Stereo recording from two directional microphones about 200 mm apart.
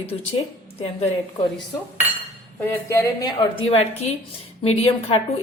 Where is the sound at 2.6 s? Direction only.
15° left (ahead or behind).